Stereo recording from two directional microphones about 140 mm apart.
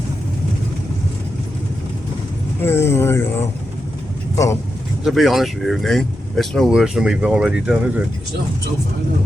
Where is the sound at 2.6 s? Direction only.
15° left (ahead or behind).